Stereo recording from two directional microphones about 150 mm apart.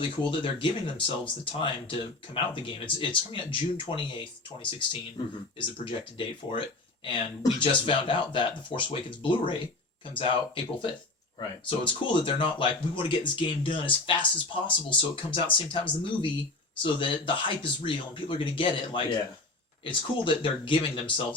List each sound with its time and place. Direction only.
0.2 s speech: 35° left (ahead or behind)
7.6 s speech: 35° left (ahead or behind)